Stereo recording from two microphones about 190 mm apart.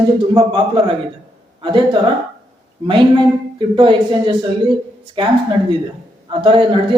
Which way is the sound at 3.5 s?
25° right (ahead or behind).